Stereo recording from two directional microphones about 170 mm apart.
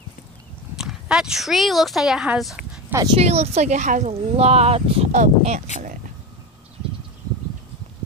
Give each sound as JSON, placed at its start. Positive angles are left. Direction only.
{"t": 0.7, "sound": "speech", "side_deg": -5}
{"t": 3.2, "sound": "speech", "side_deg": -40}